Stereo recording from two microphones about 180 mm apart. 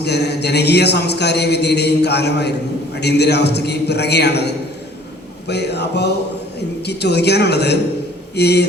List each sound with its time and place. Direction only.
0.0 s speech: 65° left (ahead or behind)